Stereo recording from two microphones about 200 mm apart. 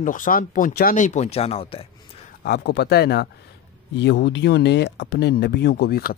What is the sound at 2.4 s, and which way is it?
Speech, 55° left (ahead or behind).